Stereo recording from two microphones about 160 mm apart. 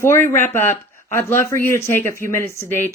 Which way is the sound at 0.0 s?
15° left (ahead or behind).